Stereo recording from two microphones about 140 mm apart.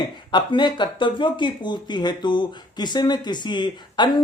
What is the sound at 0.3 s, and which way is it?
Speech, 35° left (ahead or behind).